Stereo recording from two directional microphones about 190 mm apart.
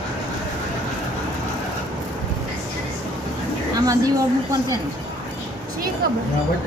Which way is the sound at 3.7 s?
20° right (ahead or behind).